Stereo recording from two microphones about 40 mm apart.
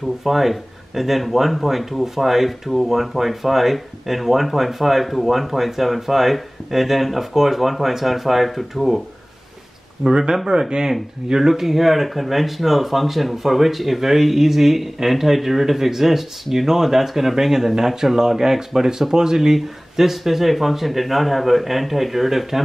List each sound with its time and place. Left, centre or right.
0.2 s speech: centre
10.0 s speech: centre